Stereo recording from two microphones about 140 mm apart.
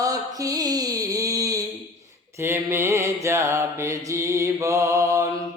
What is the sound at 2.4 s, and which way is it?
Mantra, 15° right (ahead or behind).